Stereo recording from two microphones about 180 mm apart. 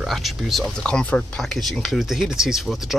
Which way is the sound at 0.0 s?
Centre (ahead or behind).